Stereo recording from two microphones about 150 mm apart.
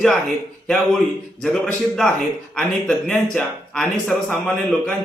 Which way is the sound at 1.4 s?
5° left (ahead or behind).